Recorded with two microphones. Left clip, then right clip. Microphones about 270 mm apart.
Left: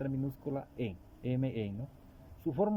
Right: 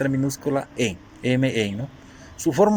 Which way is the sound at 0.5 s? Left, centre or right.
Centre.